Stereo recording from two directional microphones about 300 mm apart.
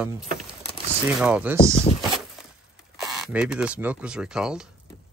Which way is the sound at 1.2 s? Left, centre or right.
Centre.